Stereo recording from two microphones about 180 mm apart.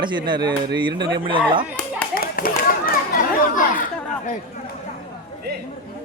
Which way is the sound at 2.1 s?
55° left (ahead or behind).